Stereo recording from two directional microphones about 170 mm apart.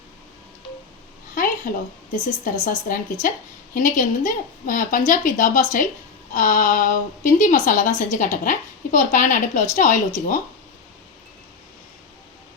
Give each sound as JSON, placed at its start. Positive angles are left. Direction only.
{"t": 1.7, "sound": "a woman's voice", "side_deg": 55}